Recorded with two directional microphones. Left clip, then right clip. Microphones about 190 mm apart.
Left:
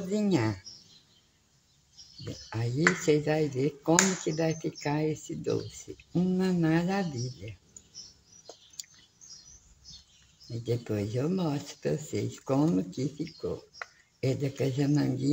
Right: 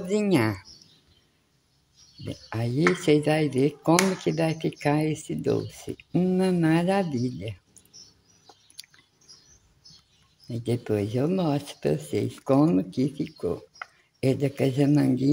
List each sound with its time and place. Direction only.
0.1 s speech: 35° right (ahead or behind)
2.5 s speech: 35° right (ahead or behind)
10.6 s speech: 40° right (ahead or behind)